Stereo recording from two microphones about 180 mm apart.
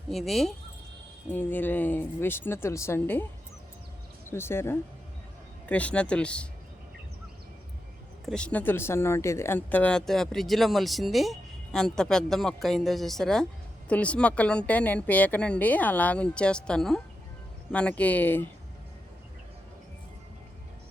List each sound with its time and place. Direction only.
0.1 s speech: centre (ahead or behind)
4.3 s speech: 15° left (ahead or behind)
8.2 s speech: 5° left (ahead or behind)